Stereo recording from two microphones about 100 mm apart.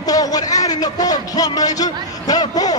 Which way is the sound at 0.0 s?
40° left (ahead or behind).